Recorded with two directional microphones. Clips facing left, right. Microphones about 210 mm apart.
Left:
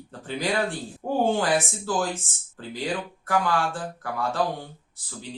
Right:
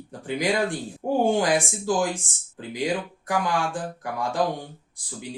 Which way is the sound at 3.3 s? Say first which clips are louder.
Left 1 dB; 15° right (ahead or behind).